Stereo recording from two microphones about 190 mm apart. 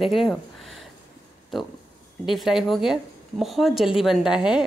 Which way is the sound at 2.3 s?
Centre (ahead or behind).